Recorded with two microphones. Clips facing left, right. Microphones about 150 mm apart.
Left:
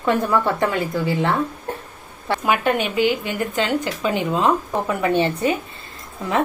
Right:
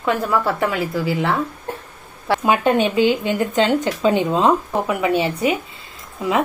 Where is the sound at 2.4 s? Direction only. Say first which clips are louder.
Right 3 dB; 20° right (ahead or behind).